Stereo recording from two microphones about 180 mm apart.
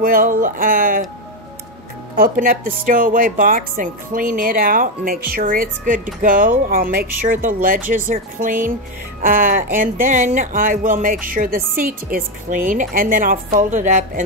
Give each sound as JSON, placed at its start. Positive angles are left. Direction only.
{"t": 0.0, "sound": "speech", "side_deg": -50}
{"t": 2.1, "sound": "speech", "side_deg": -50}